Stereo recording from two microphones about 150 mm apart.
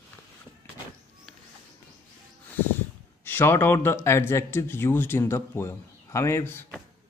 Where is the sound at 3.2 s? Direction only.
15° left (ahead or behind).